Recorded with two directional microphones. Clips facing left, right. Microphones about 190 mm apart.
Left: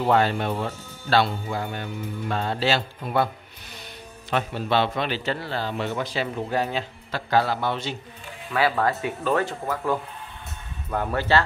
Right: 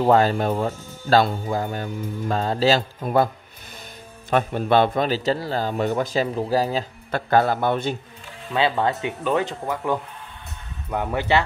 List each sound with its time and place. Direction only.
0.0 s speech: 40° right (ahead or behind)
4.3 s a man's voice: 50° right (ahead or behind)
7.1 s a man's voice: 50° right (ahead or behind)
8.5 s speech: 20° right (ahead or behind)